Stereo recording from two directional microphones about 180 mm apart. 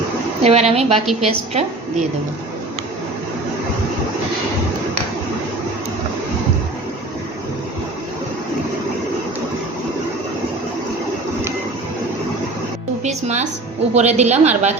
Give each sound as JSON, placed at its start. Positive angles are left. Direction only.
{"t": 0.4, "sound": "a woman's voice", "side_deg": -35}
{"t": 13.1, "sound": "music", "side_deg": -40}
{"t": 13.9, "sound": "a woman's voice", "side_deg": -35}